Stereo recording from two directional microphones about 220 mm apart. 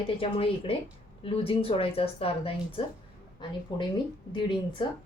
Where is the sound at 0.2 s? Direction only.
25° left (ahead or behind).